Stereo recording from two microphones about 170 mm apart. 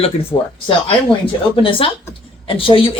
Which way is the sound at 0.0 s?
35° left (ahead or behind).